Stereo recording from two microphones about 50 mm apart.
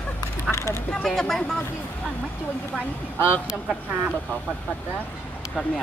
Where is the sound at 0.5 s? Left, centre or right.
Left.